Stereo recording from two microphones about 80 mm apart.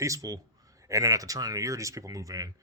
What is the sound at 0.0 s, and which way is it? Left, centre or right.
A man's voice, right.